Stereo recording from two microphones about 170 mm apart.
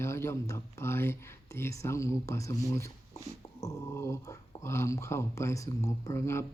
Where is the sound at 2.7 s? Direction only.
20° left (ahead or behind).